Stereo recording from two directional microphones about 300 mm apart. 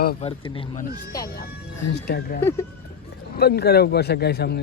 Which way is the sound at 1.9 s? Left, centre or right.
Left.